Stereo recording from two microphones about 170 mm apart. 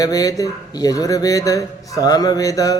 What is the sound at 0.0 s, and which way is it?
Speech, 20° left (ahead or behind).